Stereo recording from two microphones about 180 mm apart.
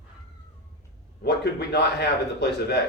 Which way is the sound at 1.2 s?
65° left (ahead or behind).